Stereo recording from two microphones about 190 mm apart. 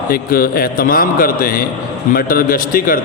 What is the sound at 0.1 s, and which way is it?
A man's voice, 50° left (ahead or behind).